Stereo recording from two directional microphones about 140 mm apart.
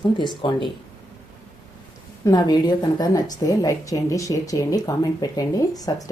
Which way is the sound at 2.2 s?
30° left (ahead or behind).